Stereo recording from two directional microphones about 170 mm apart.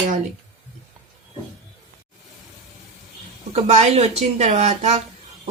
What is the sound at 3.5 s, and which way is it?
Speech, 40° right (ahead or behind).